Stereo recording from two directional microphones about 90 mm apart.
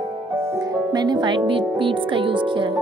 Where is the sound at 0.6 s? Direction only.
45° right (ahead or behind); by 2.7 s 65° right (ahead or behind).